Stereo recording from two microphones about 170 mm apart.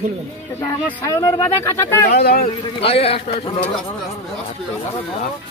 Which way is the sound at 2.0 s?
70° left (ahead or behind).